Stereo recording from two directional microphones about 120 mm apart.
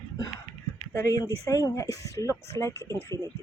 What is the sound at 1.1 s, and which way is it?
Speech, 30° left (ahead or behind).